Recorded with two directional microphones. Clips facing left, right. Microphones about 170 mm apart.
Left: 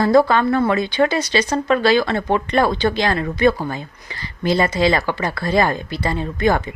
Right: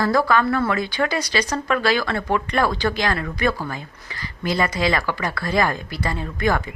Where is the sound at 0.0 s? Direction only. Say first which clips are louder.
Left 5 dB; 25° left (ahead or behind).